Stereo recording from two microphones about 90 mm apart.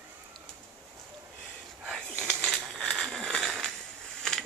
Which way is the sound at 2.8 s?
5° left (ahead or behind).